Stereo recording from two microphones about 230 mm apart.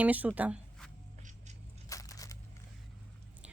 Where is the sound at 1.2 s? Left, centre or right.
Right.